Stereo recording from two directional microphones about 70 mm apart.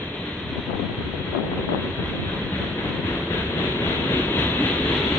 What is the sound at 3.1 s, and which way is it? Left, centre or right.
Train, left.